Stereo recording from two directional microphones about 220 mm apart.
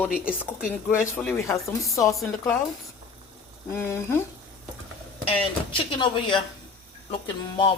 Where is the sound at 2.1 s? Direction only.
Centre (ahead or behind).